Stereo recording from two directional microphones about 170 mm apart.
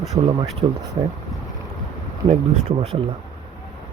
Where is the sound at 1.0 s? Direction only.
45° right (ahead or behind).